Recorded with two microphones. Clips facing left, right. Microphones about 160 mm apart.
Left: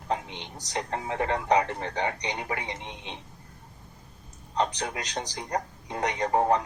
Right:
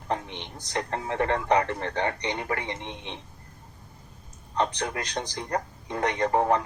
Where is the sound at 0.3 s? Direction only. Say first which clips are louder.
Right 1 dB; 15° left (ahead or behind).